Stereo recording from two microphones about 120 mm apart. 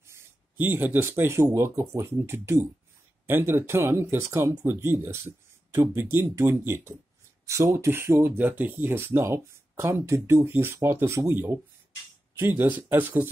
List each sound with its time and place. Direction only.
0.0 s speech: 20° right (ahead or behind)